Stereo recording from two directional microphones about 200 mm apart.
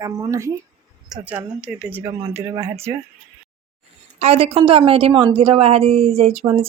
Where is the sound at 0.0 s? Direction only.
15° right (ahead or behind).